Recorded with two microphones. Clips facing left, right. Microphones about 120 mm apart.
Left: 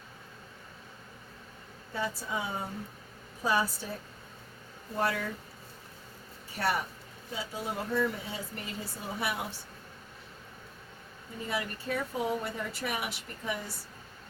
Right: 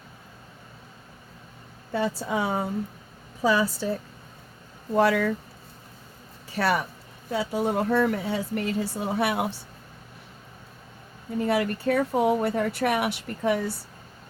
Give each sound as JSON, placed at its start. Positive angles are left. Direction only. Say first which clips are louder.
{"t": 1.9, "sound": "a woman's voice", "louder": "right 8 dB", "side_deg": -75}
{"t": 4.9, "sound": "a woman's voice", "louder": "right 10 dB", "side_deg": -90}
{"t": 6.5, "sound": "a woman's voice", "louder": "right 6 dB", "side_deg": -90}
{"t": 7.3, "sound": "speech", "louder": "right 11 dB", "side_deg": -70}
{"t": 11.3, "sound": "speech", "louder": "right 11 dB", "side_deg": -70}